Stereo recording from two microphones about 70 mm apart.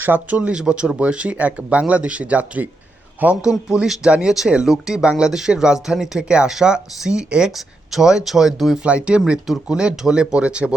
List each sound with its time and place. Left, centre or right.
0.0 s speech: right
3.7 s speech: centre
8.8 s speech: centre